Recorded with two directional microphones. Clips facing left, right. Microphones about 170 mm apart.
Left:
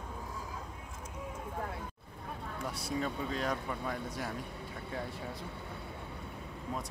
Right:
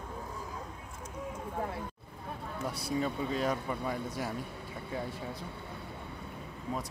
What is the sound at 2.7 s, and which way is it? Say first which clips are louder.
Speech: right 3 dB; 5° right (ahead or behind).